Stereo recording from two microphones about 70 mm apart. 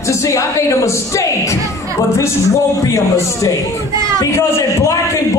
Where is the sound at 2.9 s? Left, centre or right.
Left.